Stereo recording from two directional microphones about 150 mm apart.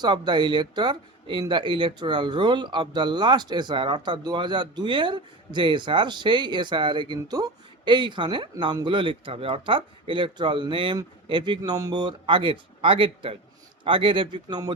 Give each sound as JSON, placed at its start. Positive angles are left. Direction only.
{"t": 0.0, "sound": "speech", "side_deg": -30}